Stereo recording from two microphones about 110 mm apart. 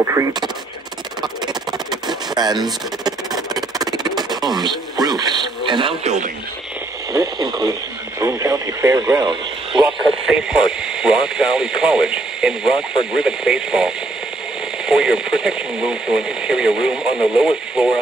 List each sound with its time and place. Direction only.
0.0 s speech: 25° right (ahead or behind)
1.5 s a sound: 40° right (ahead or behind)
7.1 s speech: 35° right (ahead or behind)
9.8 s speech: 5° right (ahead or behind)